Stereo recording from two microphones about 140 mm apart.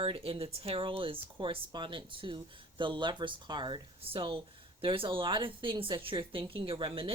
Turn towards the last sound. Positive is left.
turn(degrees=-40)  # may be behind; listen again after turning